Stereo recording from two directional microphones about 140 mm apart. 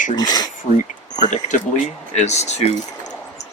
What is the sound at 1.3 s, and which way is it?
Speech, 60° left (ahead or behind).